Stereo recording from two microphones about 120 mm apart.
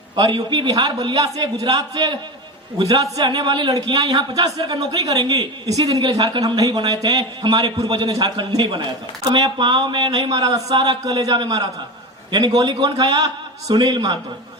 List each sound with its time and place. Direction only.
0.2 s a man's voice: 40° right (ahead or behind)